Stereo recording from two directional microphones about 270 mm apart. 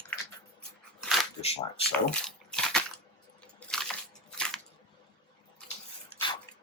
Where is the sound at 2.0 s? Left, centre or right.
Centre.